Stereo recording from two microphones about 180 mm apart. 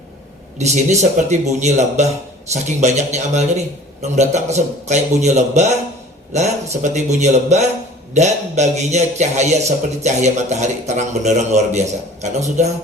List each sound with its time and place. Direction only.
0.6 s a man's voice: 40° right (ahead or behind)